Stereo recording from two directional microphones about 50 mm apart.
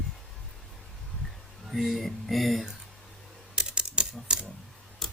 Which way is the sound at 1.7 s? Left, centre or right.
Centre.